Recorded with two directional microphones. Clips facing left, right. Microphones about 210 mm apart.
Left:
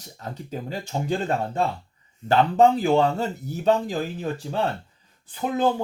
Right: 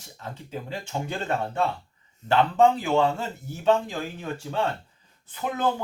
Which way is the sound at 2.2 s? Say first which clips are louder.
Left 2 dB; 40° left (ahead or behind).